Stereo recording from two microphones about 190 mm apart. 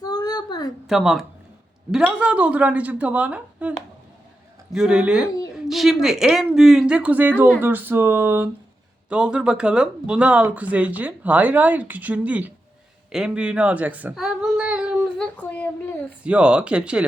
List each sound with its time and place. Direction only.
0.0 s a sound: 20° left (ahead or behind)
0.9 s speech: centre (ahead or behind)
15.4 s a woman's voice: 10° left (ahead or behind)
16.2 s speech: 5° right (ahead or behind)